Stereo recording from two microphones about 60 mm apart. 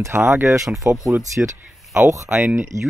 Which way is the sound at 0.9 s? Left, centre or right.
Right.